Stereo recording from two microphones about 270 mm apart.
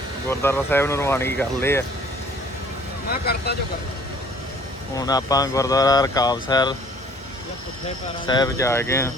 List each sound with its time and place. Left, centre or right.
0.3 s speech: centre
3.1 s speech: left
4.9 s speech: centre
8.3 s speech: centre